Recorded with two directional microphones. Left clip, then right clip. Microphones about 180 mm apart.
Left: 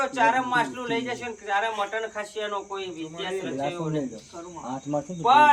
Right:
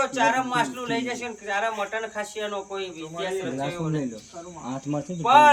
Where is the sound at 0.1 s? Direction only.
10° right (ahead or behind).